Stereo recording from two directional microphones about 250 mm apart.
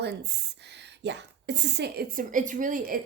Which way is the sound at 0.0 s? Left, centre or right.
Right.